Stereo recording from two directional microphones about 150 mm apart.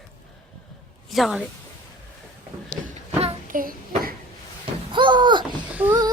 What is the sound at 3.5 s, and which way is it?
Child singing, 70° right (ahead or behind).